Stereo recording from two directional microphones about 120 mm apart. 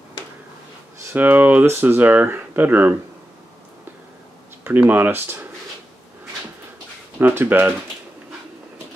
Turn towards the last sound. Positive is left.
turn(degrees=-20)  # may be behind; listen again after turning